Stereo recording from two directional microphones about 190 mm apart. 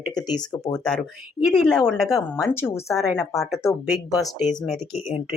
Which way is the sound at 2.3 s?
15° left (ahead or behind).